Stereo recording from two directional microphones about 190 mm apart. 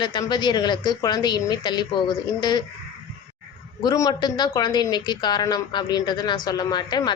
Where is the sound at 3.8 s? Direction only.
20° left (ahead or behind).